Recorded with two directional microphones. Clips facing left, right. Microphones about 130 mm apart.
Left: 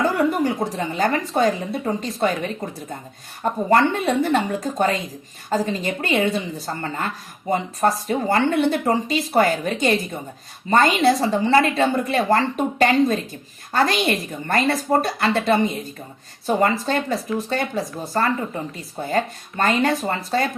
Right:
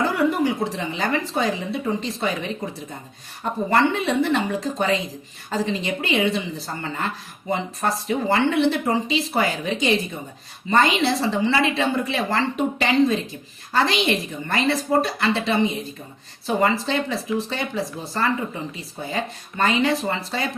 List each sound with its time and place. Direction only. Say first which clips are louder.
0.1 s a woman's voice: left 1 dB; 45° left (ahead or behind)
3.7 s a woman's voice: left 2 dB; 45° left (ahead or behind)